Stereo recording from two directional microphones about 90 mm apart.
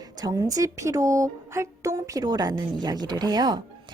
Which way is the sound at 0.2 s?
45° right (ahead or behind).